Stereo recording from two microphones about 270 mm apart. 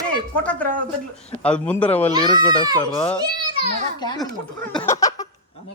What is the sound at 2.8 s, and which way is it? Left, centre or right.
Speech, centre.